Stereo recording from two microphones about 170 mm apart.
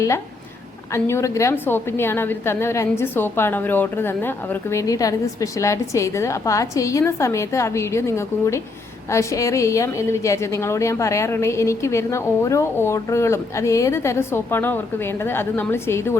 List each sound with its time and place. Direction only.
0.9 s a woman's voice: 15° left (ahead or behind)